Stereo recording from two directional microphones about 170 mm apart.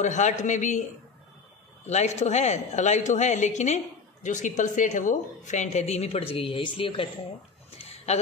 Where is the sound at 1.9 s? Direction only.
40° left (ahead or behind).